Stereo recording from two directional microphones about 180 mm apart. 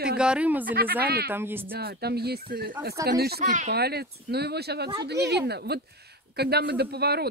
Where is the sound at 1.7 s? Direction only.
60° right (ahead or behind).